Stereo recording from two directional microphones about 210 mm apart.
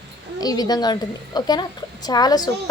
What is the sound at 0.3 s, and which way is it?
A woman's voice, 20° left (ahead or behind).